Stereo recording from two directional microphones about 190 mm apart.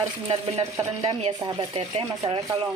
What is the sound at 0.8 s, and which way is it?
Speech, 25° right (ahead or behind).